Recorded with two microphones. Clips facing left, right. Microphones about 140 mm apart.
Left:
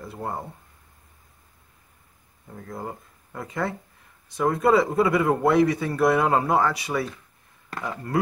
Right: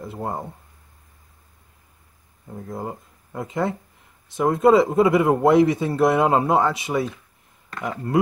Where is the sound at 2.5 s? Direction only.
20° right (ahead or behind).